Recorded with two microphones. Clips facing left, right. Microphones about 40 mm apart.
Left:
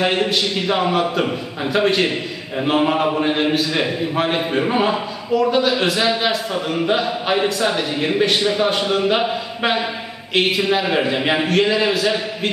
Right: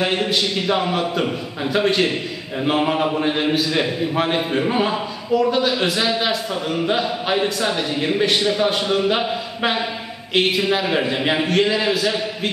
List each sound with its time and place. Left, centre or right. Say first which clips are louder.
0.0 s a man's voice: left 2 dB; centre